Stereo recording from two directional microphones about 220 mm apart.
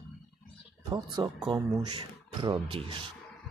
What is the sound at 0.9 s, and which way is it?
Speech, 20° right (ahead or behind).